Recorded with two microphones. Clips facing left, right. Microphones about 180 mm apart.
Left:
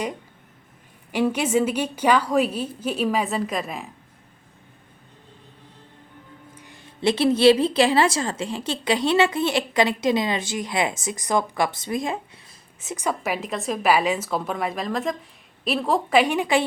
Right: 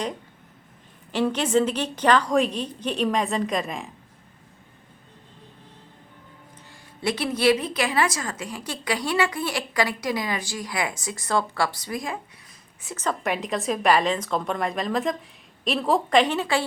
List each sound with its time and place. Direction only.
1.1 s a woman's voice: 10° left (ahead or behind)
6.6 s a woman's voice: 20° left (ahead or behind)